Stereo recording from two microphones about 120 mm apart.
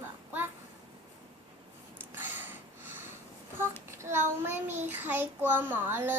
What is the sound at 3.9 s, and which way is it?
Child singing, 20° right (ahead or behind).